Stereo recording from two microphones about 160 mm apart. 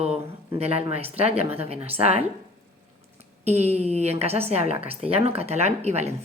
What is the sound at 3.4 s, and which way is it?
Speech, 40° right (ahead or behind).